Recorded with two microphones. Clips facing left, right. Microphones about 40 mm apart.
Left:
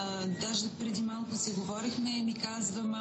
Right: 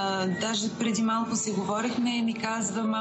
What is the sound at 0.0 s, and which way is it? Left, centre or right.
Speech, right.